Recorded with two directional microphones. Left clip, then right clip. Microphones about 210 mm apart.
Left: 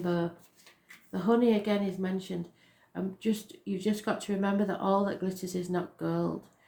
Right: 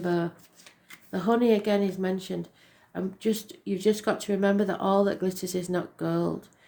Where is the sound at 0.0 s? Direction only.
45° right (ahead or behind).